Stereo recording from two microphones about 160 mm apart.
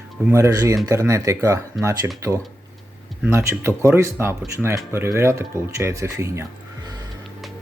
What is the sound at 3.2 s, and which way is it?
Speech, 15° right (ahead or behind).